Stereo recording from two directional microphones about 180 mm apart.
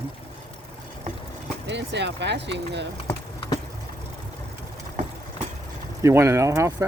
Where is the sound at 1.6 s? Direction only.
75° right (ahead or behind).